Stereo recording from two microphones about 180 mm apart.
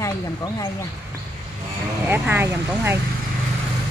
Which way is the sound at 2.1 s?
10° right (ahead or behind).